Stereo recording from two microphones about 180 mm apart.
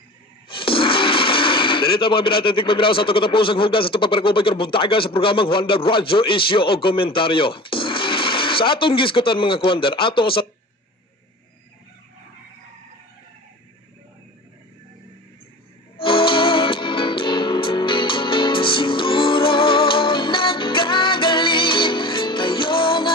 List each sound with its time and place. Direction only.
0.4 s speech: 30° left (ahead or behind)
16.0 s music: 30° left (ahead or behind)